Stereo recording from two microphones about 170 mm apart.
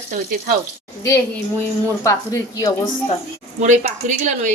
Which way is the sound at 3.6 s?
45° right (ahead or behind).